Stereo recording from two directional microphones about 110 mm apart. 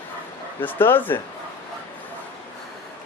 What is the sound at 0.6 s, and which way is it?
Speech, 20° left (ahead or behind).